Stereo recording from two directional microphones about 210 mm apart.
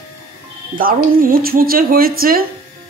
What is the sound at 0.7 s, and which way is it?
Speech, 40° right (ahead or behind).